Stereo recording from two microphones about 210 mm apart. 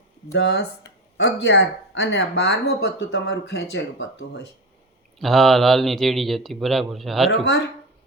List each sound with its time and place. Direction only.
0.3 s speech: 55° left (ahead or behind)
5.2 s speech: centre (ahead or behind)